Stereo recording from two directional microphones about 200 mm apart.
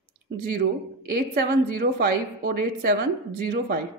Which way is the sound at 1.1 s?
50° right (ahead or behind).